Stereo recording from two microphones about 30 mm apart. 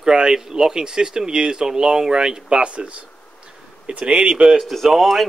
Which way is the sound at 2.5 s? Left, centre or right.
Right.